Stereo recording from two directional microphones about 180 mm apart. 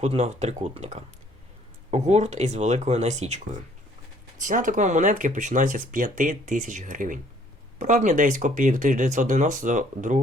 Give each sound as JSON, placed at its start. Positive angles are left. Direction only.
{"t": 0.0, "sound": "speech", "side_deg": -40}